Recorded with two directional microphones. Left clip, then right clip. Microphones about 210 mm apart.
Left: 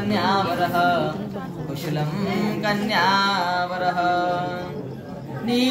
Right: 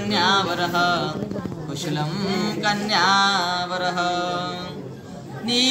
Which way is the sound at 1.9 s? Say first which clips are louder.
Even; 25° left (ahead or behind).